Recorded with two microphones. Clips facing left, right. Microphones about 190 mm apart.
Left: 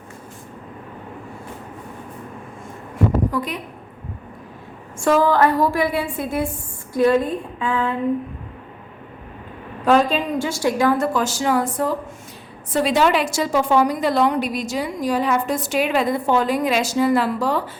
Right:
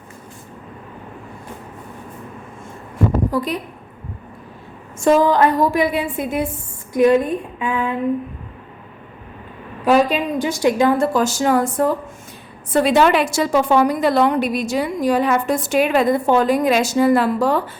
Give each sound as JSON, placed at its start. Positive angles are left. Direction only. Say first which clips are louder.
{"t": 3.3, "sound": "a woman's voice", "louder": "right 4 dB", "side_deg": -35}
{"t": 4.9, "sound": "a woman's voice", "louder": "right 2 dB", "side_deg": -20}
{"t": 9.8, "sound": "a woman's voice", "louder": "right 1 dB", "side_deg": -10}
{"t": 11.1, "sound": "a woman's voice", "louder": "right 3 dB", "side_deg": -45}